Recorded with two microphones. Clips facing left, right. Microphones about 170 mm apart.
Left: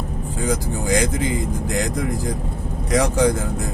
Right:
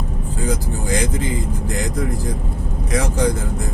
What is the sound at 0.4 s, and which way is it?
Speech, 90° left.